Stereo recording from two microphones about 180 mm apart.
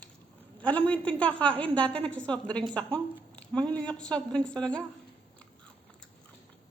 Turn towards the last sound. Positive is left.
turn(degrees=5)  # may be behind; listen again after turning